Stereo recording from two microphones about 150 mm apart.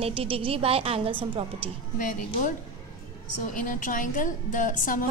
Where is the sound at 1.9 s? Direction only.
60° left (ahead or behind).